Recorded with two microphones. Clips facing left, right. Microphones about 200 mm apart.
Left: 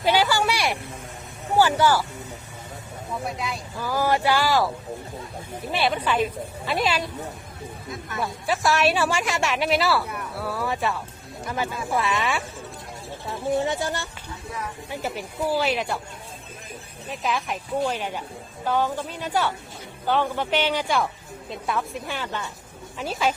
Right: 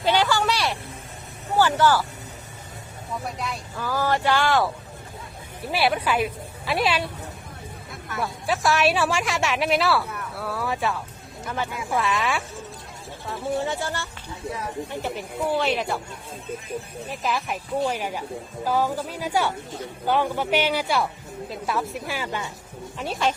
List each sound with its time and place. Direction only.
0.0 s vehicle: 10° left (ahead or behind)
1.5 s speech: 10° left (ahead or behind)
3.2 s a woman's voice: centre (ahead or behind)
3.8 s speech: 15° left (ahead or behind)
5.7 s a woman's voice: 5° right (ahead or behind)
8.2 s a woman's voice: centre (ahead or behind)
13.6 s speech: 15° left (ahead or behind)
14.8 s a woman's voice: 5° left (ahead or behind)
17.1 s a woman's voice: centre (ahead or behind)
23.0 s a woman's voice: centre (ahead or behind)